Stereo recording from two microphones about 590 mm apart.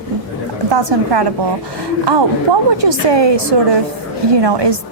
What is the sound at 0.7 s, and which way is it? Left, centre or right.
Speech, right.